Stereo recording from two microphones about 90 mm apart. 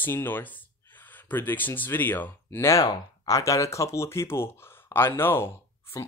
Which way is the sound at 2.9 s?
40° left (ahead or behind).